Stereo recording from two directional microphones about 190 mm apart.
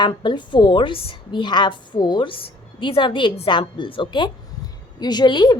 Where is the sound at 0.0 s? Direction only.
25° left (ahead or behind).